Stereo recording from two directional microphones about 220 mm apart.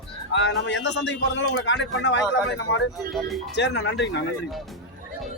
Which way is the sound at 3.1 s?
Centre (ahead or behind).